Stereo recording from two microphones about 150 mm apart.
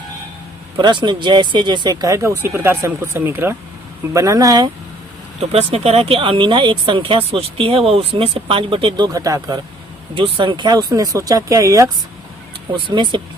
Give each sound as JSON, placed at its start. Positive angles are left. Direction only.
{"t": 0.8, "sound": "speech", "side_deg": -30}
{"t": 5.4, "sound": "speech", "side_deg": -45}
{"t": 10.2, "sound": "speech", "side_deg": -35}
{"t": 12.7, "sound": "speech", "side_deg": -30}